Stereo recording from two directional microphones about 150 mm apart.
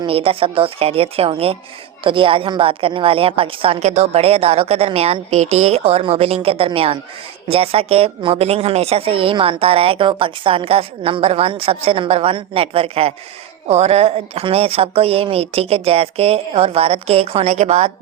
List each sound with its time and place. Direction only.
0.0 s speech: 40° right (ahead or behind)